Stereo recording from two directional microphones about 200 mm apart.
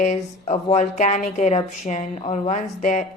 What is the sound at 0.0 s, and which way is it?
Speech, 35° left (ahead or behind).